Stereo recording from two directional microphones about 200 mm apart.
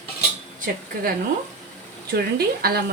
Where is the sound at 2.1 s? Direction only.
50° right (ahead or behind).